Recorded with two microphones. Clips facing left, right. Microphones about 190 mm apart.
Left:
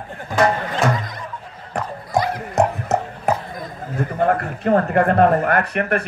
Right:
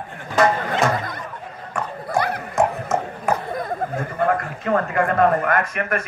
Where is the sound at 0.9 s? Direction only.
55° right (ahead or behind).